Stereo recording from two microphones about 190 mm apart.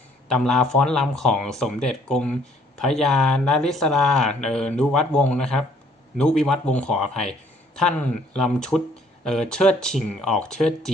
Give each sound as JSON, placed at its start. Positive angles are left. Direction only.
{"t": 0.3, "sound": "speech", "side_deg": 5}